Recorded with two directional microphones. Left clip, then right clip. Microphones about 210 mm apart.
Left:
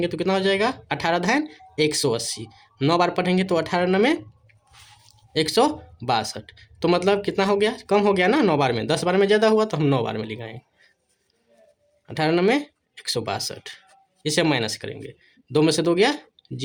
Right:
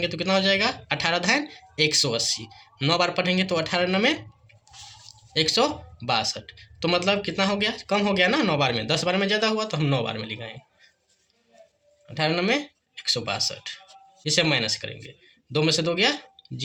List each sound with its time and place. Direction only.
0.0 s speech: 55° left (ahead or behind)
12.0 s speech: 55° left (ahead or behind)